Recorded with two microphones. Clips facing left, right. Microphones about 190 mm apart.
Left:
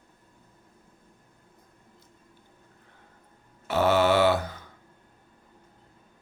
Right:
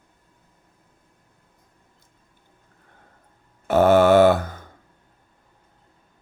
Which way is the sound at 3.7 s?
50° right (ahead or behind).